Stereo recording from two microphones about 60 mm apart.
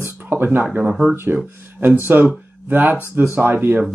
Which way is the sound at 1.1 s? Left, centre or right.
Right.